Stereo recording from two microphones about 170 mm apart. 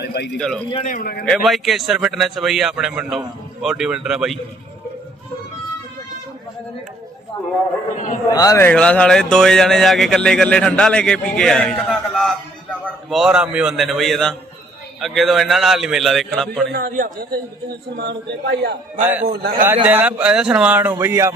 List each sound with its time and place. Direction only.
0.0 s a sound: 75° left (ahead or behind)
0.3 s speech: 5° left (ahead or behind)
0.9 s a man's voice: 60° left (ahead or behind)
1.2 s speech: centre (ahead or behind)
7.9 s a man's voice: 50° left (ahead or behind)
8.3 s a man's voice: 20° left (ahead or behind); by 16.7 s centre (ahead or behind)
16.9 s a man's voice: 60° right (ahead or behind); by 18.7 s 85° right
19.2 s a man's voice: 65° right (ahead or behind)
19.6 s speech: 10° right (ahead or behind)